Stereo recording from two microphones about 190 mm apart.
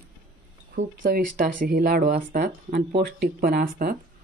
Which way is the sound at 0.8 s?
45° right (ahead or behind).